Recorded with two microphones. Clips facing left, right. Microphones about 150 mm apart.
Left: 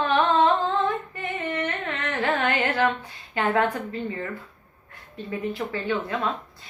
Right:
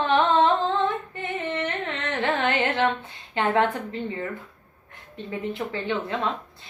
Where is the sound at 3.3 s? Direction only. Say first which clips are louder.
Right 1 dB; 25° right (ahead or behind).